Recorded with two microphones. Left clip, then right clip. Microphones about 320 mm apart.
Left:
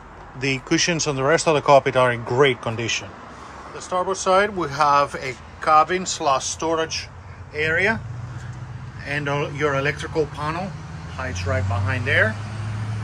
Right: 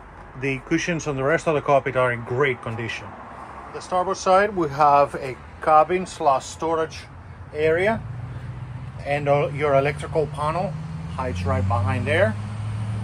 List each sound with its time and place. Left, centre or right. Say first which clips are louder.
0.4 s speech: left 3 dB; centre
9.0 s speech: right 4 dB; centre